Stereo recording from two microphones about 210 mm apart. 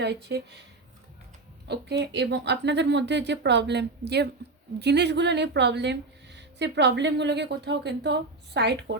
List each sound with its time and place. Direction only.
0.0 s speech: 55° right (ahead or behind)
1.6 s a woman's voice: 55° right (ahead or behind)